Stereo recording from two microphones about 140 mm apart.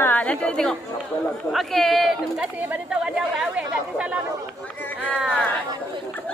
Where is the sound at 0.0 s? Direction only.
10° left (ahead or behind).